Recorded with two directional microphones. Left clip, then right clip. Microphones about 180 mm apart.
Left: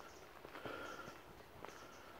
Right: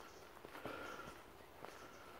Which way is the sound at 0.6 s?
5° right (ahead or behind).